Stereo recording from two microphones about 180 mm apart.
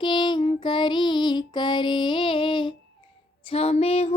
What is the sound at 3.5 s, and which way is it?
Music, 35° left (ahead or behind).